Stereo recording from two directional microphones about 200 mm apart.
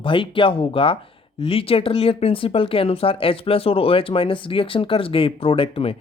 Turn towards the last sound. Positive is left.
turn(degrees=30)  # may be behind; listen again after turning